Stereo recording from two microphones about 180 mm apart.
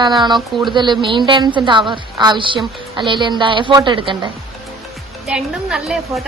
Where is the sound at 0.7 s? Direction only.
25° right (ahead or behind).